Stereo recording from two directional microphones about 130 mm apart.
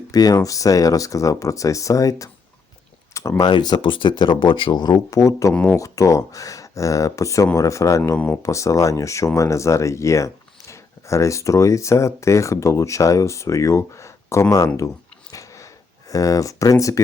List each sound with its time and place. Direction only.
0.1 s speech: 30° left (ahead or behind)
3.4 s speech: 35° left (ahead or behind)
8.1 s speech: 10° left (ahead or behind)
8.4 s speech: 25° left (ahead or behind)
15.3 s a sound: 25° left (ahead or behind)